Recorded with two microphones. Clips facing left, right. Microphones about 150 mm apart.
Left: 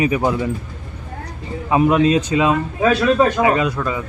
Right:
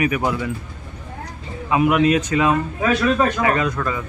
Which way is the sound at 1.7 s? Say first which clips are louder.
Left 2 dB; 30° left (ahead or behind).